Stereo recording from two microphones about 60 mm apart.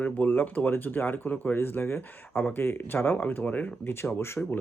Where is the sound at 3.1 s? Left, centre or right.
Left.